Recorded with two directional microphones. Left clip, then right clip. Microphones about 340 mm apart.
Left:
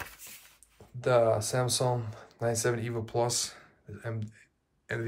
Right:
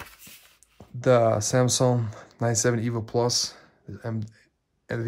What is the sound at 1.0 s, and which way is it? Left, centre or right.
Speech, right.